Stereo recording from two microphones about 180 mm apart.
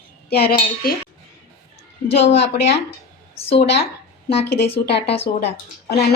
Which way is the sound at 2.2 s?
70° left (ahead or behind).